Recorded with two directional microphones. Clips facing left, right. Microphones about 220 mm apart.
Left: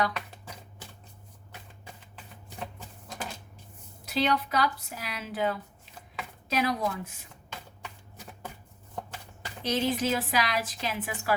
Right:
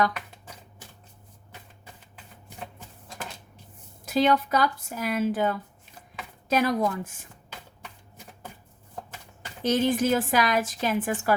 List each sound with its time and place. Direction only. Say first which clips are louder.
4.0 s a woman's voice: right 5 dB; 45° right (ahead or behind)
9.6 s a woman's voice: right 5 dB; 50° right (ahead or behind)